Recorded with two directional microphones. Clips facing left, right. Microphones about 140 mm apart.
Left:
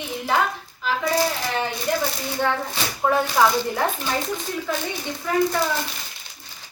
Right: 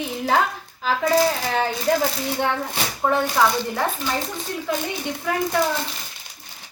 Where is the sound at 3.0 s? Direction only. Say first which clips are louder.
Left 1 dB; 5° left (ahead or behind).